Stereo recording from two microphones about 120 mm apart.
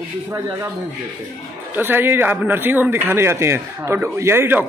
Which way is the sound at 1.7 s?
15° right (ahead or behind).